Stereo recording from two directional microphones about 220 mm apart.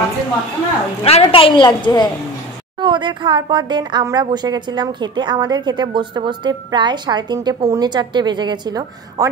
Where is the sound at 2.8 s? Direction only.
20° right (ahead or behind).